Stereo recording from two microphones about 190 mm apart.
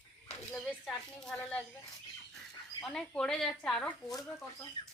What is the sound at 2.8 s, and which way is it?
Speech, 5° left (ahead or behind).